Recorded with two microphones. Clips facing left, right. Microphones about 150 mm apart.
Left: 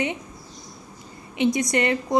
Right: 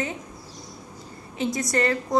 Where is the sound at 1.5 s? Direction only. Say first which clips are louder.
Right 3 dB; 20° left (ahead or behind).